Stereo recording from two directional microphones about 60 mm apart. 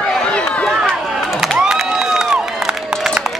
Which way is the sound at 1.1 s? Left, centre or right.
Centre.